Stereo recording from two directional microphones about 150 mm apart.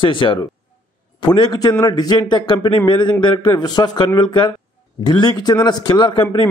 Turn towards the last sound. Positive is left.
turn(degrees=30)  # may be behind; listen again after turning